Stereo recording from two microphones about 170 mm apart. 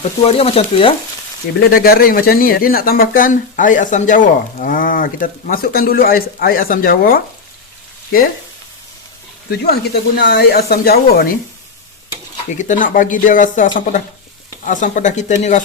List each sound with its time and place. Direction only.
0.2 s speech: 35° left (ahead or behind)
1.6 s speech: 60° left (ahead or behind)
9.5 s speech: 70° left (ahead or behind)
12.5 s speech: 50° left (ahead or behind)